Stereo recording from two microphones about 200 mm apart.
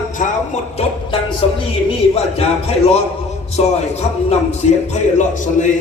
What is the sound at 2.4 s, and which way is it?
Speech, 30° left (ahead or behind).